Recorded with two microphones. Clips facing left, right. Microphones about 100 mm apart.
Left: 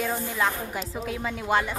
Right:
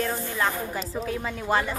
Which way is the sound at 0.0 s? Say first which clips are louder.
Even; 5° left (ahead or behind).